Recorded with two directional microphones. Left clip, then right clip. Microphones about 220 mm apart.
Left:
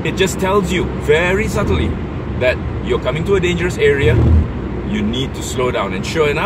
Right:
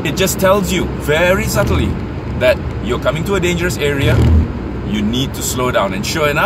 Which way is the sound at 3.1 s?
20° right (ahead or behind).